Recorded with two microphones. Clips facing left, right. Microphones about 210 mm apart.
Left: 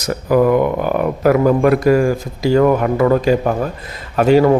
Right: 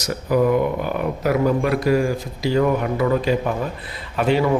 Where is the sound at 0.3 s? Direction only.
70° left (ahead or behind).